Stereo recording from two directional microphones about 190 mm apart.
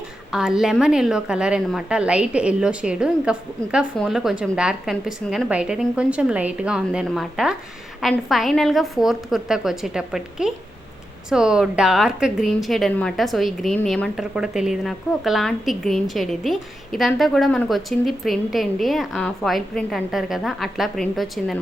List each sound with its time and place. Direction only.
0.3 s a woman's voice: 5° right (ahead or behind)